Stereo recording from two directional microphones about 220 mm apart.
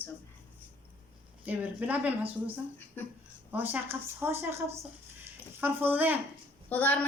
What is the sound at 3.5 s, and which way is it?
Speech, 10° right (ahead or behind).